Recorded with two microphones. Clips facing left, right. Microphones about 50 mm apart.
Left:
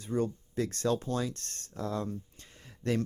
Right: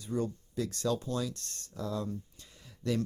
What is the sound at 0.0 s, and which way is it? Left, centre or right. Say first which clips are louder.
Speech: left 2 dB; left.